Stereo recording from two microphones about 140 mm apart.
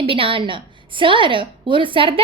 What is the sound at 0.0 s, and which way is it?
A woman's voice, 40° right (ahead or behind).